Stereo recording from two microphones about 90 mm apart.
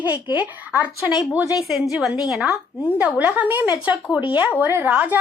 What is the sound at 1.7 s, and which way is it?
Speech, 5° right (ahead or behind).